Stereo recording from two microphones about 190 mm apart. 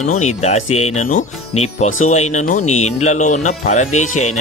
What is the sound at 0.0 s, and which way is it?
Speech, 40° left (ahead or behind).